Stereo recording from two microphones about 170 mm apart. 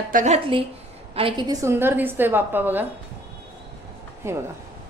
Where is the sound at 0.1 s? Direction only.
45° right (ahead or behind).